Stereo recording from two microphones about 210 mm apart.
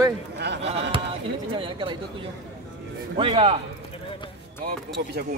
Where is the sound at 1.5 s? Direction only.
25° right (ahead or behind).